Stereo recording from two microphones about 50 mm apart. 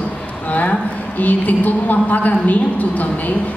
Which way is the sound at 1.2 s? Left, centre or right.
Left.